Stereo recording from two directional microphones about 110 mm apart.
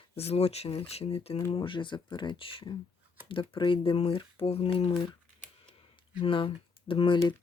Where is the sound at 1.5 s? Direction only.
50° left (ahead or behind).